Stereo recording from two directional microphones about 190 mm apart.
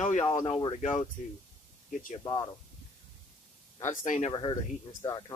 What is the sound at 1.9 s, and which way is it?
Speech, 45° left (ahead or behind).